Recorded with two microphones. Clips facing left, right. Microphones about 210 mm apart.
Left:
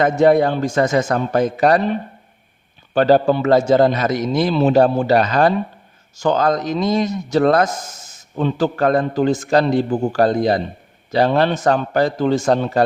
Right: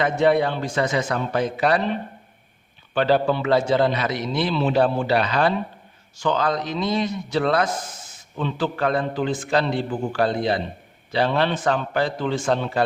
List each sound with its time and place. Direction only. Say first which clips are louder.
0.0 s a man's voice: left 5 dB; 45° left (ahead or behind)